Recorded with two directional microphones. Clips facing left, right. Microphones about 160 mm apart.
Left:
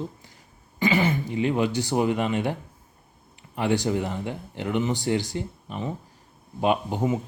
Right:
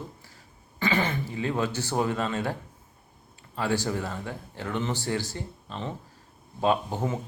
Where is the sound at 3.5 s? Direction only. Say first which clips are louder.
Left 4 dB; 20° left (ahead or behind).